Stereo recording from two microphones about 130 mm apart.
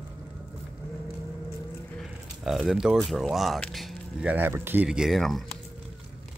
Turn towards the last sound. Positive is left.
turn(degrees=0)  # may be behind; listen again after turning